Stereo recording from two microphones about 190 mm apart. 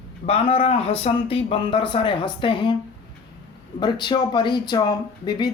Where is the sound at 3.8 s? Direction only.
25° left (ahead or behind).